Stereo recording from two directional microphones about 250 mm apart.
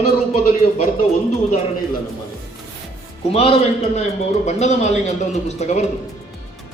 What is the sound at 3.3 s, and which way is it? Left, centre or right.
A man's voice, left.